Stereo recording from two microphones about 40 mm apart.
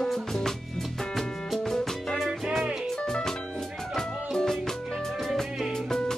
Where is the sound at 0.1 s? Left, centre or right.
Centre.